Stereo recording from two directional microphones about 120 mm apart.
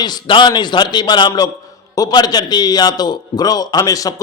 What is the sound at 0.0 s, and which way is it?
A man's voice, 40° left (ahead or behind).